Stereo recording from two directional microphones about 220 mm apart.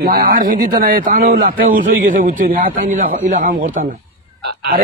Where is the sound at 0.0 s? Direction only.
40° right (ahead or behind).